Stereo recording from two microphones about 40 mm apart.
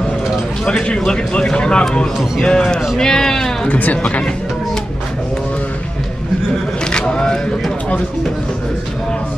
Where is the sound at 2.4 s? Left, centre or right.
Centre.